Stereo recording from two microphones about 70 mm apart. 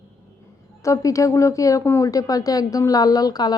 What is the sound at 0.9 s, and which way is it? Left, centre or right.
A woman's voice, left.